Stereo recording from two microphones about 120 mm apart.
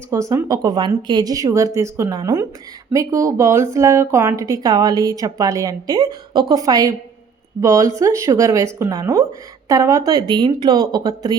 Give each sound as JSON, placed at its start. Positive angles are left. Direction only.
{"t": 0.1, "sound": "speech", "side_deg": -25}